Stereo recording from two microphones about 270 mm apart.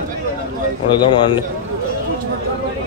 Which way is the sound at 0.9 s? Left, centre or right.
Centre.